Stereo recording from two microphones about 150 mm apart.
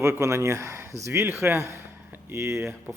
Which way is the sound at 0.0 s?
20° right (ahead or behind).